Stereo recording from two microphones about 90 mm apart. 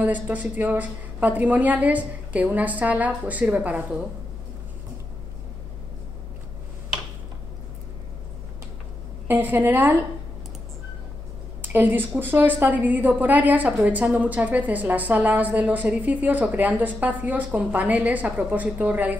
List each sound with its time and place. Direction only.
0.0 s a woman's voice: 15° right (ahead or behind)
9.3 s a woman's voice: 20° right (ahead or behind)
11.6 s a woman's voice: 20° right (ahead or behind)